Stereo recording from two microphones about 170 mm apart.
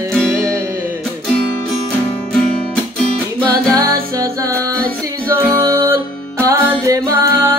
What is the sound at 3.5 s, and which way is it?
Music, 20° right (ahead or behind).